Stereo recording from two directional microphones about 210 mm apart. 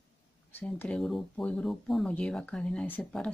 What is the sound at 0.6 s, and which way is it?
Speech, 5° left (ahead or behind).